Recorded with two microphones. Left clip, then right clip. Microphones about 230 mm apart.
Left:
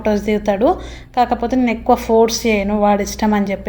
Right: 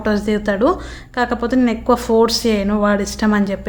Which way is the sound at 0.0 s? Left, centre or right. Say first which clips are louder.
Left 2 dB; centre.